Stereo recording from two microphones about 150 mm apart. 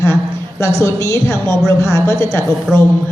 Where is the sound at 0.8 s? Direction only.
20° left (ahead or behind).